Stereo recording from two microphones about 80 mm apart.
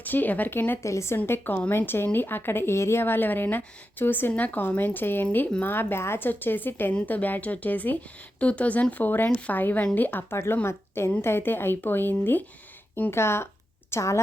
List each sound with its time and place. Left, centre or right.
0.0 s speech: left
0.8 s speech: left
1.3 s a woman's voice: left